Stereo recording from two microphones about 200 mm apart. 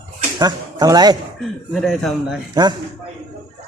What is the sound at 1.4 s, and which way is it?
Speech, centre (ahead or behind).